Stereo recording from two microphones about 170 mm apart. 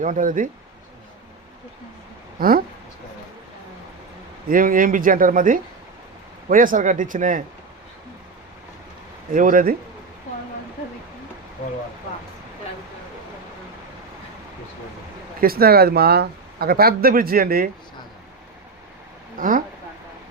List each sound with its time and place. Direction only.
0.0 s speech: 50° right (ahead or behind)
2.4 s speech: 60° right (ahead or behind)
4.4 s speech: 55° right (ahead or behind)
9.3 s speech: 55° right (ahead or behind)
15.4 s speech: 60° right (ahead or behind)
19.4 s speech: 55° right (ahead or behind)